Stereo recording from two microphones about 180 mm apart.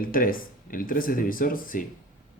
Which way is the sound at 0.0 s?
50° left (ahead or behind).